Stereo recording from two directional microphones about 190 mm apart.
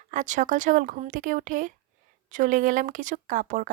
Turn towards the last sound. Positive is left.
turn(degrees=-45)  # may be behind; listen again after turning